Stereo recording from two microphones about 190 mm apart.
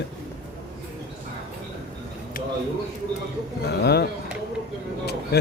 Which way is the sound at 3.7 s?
60° left (ahead or behind).